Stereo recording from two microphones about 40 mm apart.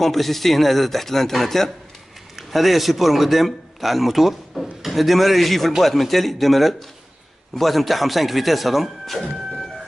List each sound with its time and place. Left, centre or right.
0.0 s a man's voice: centre